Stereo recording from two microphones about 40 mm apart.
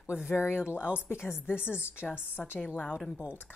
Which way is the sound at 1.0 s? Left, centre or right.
Left.